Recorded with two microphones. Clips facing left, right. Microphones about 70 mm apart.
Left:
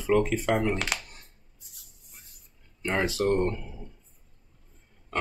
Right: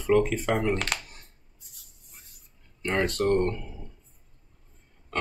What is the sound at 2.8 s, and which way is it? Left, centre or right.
Speech, centre.